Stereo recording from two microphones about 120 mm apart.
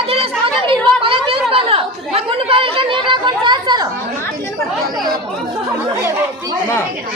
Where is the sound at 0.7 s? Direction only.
50° right (ahead or behind).